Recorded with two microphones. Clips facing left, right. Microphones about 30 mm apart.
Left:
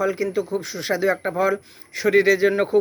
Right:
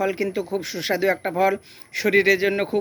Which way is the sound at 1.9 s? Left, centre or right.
Right.